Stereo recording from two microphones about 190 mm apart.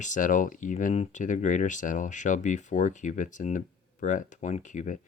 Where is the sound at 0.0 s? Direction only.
40° left (ahead or behind).